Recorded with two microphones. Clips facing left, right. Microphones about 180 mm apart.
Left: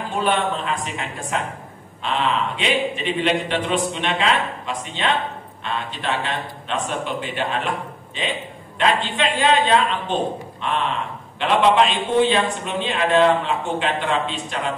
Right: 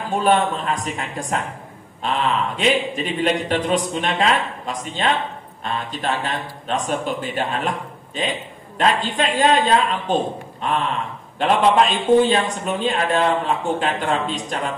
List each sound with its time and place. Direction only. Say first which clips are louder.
0.1 s a man's voice: right 4 dB; 40° right (ahead or behind)